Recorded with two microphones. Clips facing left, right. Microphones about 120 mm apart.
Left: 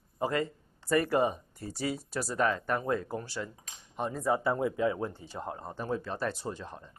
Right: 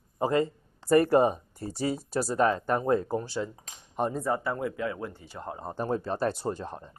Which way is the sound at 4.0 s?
45° right (ahead or behind).